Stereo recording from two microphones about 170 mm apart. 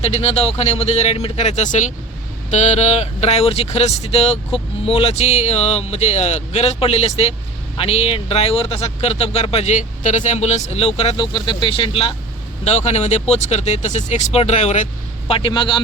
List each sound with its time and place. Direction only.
0.0 s speech: 35° left (ahead or behind)
15.3 s a man's voice: 30° left (ahead or behind)